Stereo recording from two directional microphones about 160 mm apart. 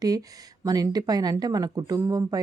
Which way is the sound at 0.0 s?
25° right (ahead or behind).